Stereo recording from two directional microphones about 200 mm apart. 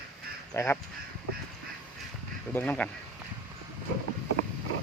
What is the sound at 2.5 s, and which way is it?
Speech, 5° left (ahead or behind).